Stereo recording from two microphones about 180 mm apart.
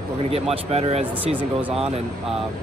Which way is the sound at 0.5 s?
35° right (ahead or behind).